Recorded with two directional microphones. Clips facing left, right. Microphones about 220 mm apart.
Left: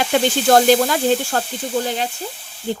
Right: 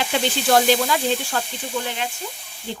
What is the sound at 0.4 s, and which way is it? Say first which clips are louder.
Speech: left 4 dB; 45° left (ahead or behind).